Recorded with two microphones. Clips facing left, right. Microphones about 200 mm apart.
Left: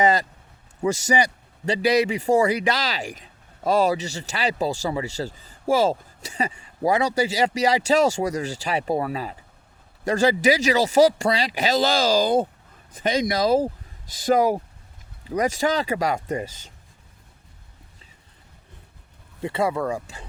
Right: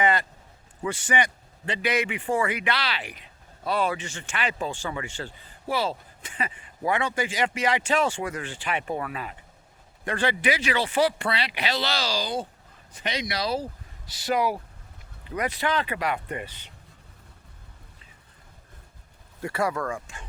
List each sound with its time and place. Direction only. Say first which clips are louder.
0.0 s speech: left 4 dB; 40° left (ahead or behind)
19.4 s speech: left 3 dB; 25° left (ahead or behind)
19.9 s speech: left 5 dB; 35° left (ahead or behind)